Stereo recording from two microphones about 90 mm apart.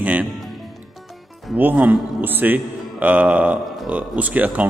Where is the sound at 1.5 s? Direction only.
20° right (ahead or behind).